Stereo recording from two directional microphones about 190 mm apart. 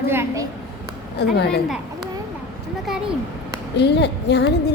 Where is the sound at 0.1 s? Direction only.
15° right (ahead or behind).